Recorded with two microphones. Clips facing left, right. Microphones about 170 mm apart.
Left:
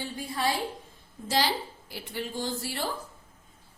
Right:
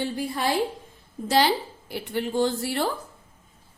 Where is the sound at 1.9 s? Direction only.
60° right (ahead or behind).